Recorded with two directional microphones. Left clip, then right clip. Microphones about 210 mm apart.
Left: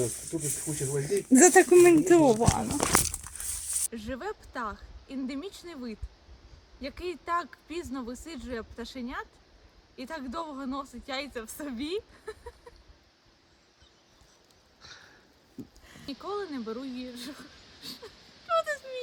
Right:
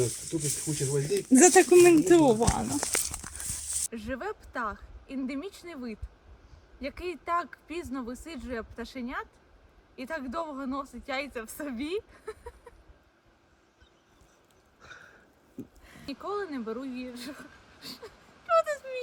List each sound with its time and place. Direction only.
0.3 s speech: 40° right (ahead or behind)
1.3 s speech: 25° right (ahead or behind)
3.9 s speech: centre (ahead or behind)
14.8 s a sound: 5° left (ahead or behind)